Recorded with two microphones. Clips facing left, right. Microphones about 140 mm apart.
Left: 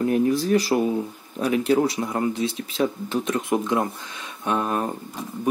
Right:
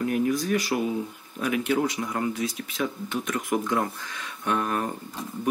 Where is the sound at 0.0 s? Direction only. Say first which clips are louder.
Left 4 dB; 30° left (ahead or behind).